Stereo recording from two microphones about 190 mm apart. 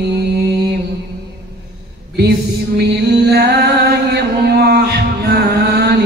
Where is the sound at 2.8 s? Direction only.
60° right (ahead or behind).